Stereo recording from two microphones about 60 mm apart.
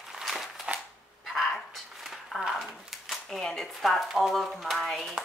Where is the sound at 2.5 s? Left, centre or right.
Centre.